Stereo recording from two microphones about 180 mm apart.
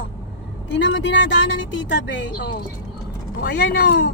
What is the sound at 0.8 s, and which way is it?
A woman's voice, 80° left.